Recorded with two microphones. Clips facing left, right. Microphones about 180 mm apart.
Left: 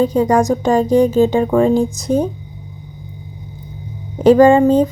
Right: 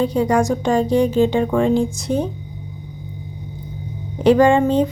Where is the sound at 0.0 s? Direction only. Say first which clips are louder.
Left 3 dB; 40° left (ahead or behind).